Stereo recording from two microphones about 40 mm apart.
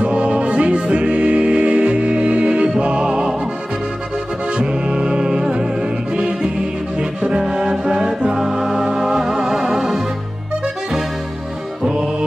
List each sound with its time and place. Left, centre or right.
0.0 s music: right
4.5 s music: right